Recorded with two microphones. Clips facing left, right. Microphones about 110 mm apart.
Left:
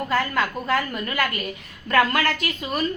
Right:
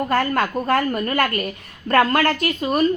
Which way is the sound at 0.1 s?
50° right (ahead or behind).